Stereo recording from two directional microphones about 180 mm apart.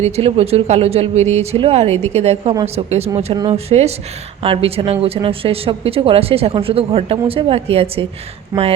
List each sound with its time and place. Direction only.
0.0 s speech: 35° right (ahead or behind)
8.5 s speech: 15° right (ahead or behind)